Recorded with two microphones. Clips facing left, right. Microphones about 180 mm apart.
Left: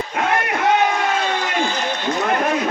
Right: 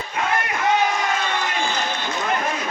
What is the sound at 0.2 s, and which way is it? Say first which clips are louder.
Music: left 3 dB; 60° left (ahead or behind).